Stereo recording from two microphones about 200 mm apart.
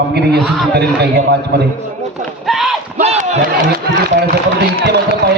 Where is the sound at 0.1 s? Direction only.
55° right (ahead or behind).